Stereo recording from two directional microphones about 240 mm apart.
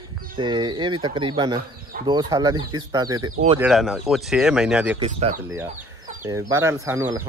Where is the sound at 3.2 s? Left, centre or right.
Right.